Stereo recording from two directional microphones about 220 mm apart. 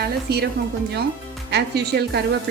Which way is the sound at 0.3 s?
45° right (ahead or behind).